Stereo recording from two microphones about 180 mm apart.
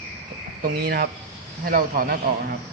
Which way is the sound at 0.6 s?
60° right (ahead or behind).